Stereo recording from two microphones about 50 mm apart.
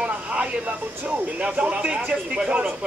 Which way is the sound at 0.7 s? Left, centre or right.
Right.